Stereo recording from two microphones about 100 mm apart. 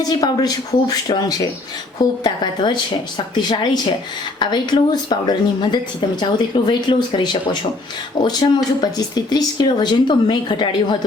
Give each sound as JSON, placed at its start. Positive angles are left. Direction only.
{"t": 0.1, "sound": "speech", "side_deg": 40}